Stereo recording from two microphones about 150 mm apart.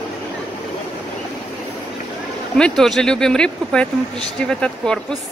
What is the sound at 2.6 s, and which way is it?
Speech, 5° left (ahead or behind).